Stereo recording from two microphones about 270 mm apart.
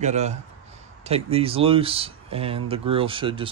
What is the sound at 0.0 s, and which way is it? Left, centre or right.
Speech, right.